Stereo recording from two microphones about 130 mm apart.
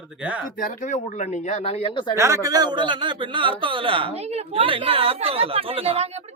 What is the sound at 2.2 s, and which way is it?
A man's voice, 25° right (ahead or behind).